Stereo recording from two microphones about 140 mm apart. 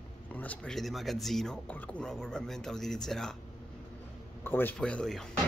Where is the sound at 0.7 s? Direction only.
Centre (ahead or behind).